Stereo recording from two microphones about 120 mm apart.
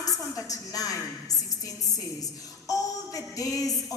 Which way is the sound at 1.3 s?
30° left (ahead or behind).